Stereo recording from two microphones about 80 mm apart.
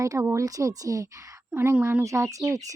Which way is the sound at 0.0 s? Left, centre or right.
Right.